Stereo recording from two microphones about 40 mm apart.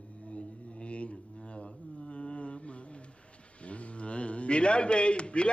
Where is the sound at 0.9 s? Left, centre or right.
Left.